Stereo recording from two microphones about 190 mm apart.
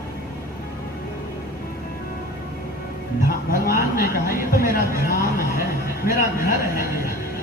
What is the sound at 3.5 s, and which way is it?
A man's voice, 50° left (ahead or behind).